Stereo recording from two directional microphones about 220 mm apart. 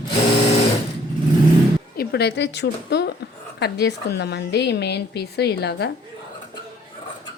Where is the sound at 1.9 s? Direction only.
50° left (ahead or behind).